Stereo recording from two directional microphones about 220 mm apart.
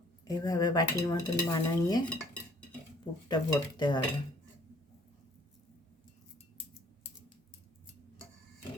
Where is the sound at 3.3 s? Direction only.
20° left (ahead or behind).